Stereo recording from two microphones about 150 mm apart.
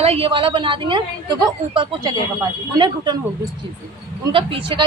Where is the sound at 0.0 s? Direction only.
40° right (ahead or behind).